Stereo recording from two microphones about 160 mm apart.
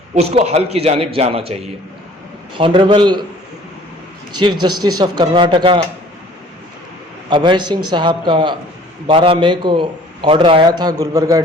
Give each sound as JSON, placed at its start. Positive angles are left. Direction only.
{"t": 0.1, "sound": "a man's voice", "side_deg": -40}
{"t": 4.4, "sound": "a man's voice", "side_deg": -25}
{"t": 7.3, "sound": "a man's voice", "side_deg": -30}